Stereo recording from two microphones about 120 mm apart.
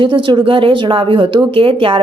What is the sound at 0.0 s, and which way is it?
Speech, 45° right (ahead or behind).